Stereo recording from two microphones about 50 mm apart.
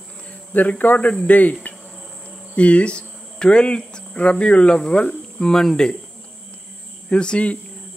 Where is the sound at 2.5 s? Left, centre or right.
Left; by 6.0 s centre.